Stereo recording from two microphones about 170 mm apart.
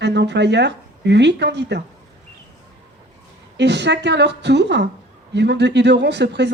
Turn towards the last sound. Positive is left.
turn(degrees=-90)